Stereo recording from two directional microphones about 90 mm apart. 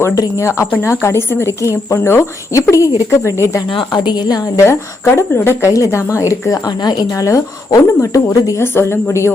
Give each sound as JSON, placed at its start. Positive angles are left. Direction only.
{"t": 0.2, "sound": "speech", "side_deg": 35}
{"t": 3.7, "sound": "a woman's voice", "side_deg": 65}
{"t": 4.6, "sound": "speech", "side_deg": 30}